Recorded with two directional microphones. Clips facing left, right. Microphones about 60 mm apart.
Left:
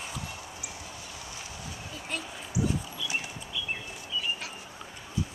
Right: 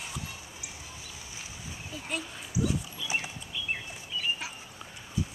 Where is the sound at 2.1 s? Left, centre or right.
Centre.